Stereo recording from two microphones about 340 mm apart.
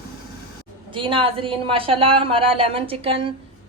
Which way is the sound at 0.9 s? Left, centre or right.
Centre.